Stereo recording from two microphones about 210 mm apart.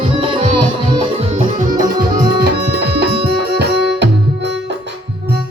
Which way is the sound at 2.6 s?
50° right (ahead or behind).